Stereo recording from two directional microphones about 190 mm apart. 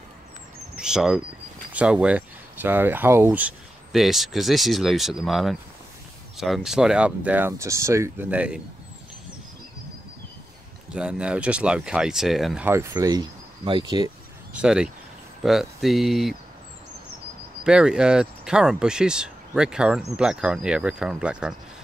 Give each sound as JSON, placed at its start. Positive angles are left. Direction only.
{"t": 0.7, "sound": "speech", "side_deg": -5}
{"t": 10.9, "sound": "speech", "side_deg": -5}
{"t": 14.5, "sound": "speech", "side_deg": -5}
{"t": 17.6, "sound": "speech", "side_deg": -5}